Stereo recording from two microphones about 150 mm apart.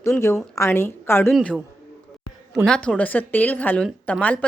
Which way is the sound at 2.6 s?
5° left (ahead or behind).